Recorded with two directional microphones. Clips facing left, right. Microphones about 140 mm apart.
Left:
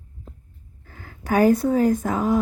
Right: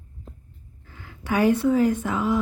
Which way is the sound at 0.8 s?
45° left (ahead or behind).